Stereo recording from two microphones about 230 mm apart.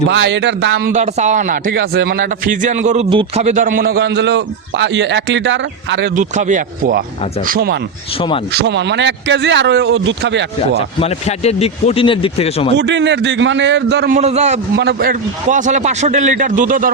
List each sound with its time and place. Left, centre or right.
0.1 s speech: right
0.9 s a man's voice: right
6.1 s a man's voice: right
10.8 s speech: left
12.7 s speech: right
14.1 s a man's voice: right
14.8 s a man's voice: right